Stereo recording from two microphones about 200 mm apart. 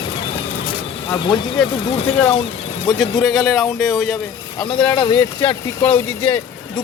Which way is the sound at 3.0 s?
Centre (ahead or behind).